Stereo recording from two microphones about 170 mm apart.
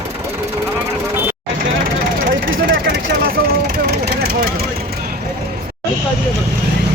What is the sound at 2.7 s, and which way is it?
Vehicle, 60° right (ahead or behind).